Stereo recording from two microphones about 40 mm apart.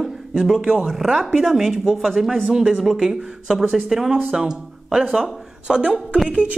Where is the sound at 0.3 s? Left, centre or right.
Centre.